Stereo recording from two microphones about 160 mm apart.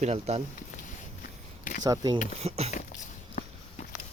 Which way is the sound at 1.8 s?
25° right (ahead or behind).